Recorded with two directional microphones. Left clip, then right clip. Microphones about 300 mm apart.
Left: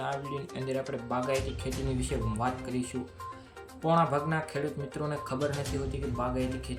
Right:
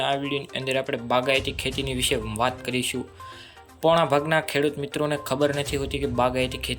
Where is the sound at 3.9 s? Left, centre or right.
Centre.